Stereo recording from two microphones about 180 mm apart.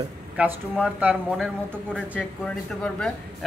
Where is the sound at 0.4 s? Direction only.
10° right (ahead or behind).